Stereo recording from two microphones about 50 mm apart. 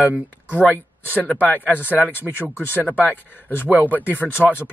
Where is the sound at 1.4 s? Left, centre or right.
Left.